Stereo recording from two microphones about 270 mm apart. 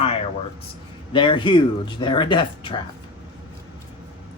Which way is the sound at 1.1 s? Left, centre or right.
Centre.